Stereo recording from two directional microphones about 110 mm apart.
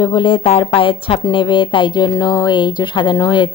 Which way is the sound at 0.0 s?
45° left (ahead or behind).